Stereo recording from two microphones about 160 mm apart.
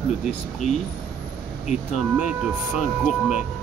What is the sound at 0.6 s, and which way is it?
Speech, 45° left (ahead or behind).